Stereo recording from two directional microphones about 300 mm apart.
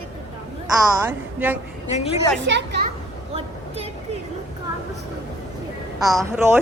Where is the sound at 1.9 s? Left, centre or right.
Left.